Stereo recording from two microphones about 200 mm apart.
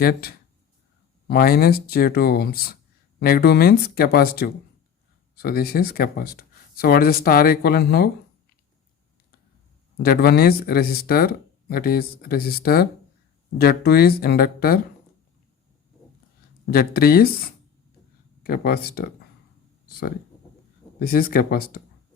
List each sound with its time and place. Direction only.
0.0 s speech: 50° left (ahead or behind)
10.0 s speech: 50° left (ahead or behind)
16.7 s speech: 50° left (ahead or behind)
19.9 s a sound: 50° left (ahead or behind)
21.0 s speech: 45° left (ahead or behind)